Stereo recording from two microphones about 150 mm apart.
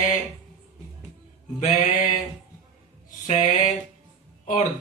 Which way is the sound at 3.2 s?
50° left (ahead or behind).